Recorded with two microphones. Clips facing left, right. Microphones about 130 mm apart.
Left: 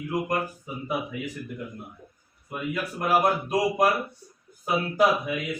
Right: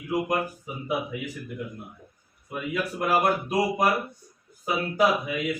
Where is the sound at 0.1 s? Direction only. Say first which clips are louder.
Right 2 dB; 10° right (ahead or behind).